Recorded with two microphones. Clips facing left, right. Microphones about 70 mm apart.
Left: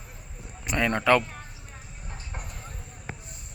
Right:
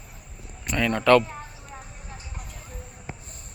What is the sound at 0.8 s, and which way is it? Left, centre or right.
Speech, left.